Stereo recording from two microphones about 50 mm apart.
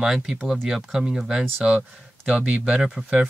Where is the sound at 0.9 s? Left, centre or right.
Centre.